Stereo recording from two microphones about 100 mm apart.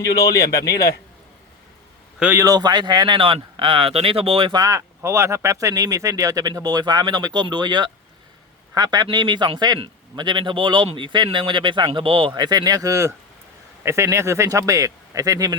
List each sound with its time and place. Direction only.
2.1 s a man's voice: 15° right (ahead or behind)
2.4 s speech: 40° right (ahead or behind); by 4.5 s 70° right (ahead or behind)
4.5 s a man's voice: 35° right (ahead or behind); by 12.3 s 60° right (ahead or behind)
12.3 s speech: 45° right (ahead or behind)